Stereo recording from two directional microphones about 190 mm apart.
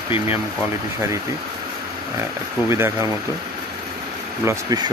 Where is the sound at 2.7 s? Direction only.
15° right (ahead or behind).